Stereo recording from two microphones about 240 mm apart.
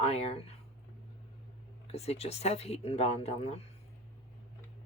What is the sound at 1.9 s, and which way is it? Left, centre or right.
Speech, left.